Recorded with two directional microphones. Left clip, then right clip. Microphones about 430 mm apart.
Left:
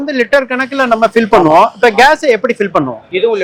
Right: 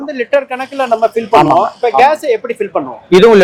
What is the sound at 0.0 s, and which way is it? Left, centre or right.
A man's voice, left.